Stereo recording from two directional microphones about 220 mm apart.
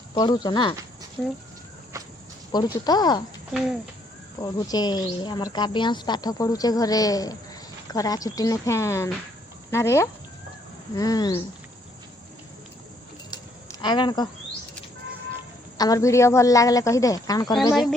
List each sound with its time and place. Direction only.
0.1 s speech: 20° left (ahead or behind)
1.2 s speech: centre (ahead or behind)
2.5 s speech: 20° left (ahead or behind)
4.4 s speech: 15° left (ahead or behind)
13.3 s a sound: 20° left (ahead or behind)
15.8 s speech: 15° left (ahead or behind)